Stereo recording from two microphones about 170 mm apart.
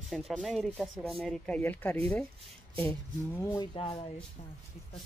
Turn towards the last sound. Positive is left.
turn(degrees=30)  # may be behind; listen again after turning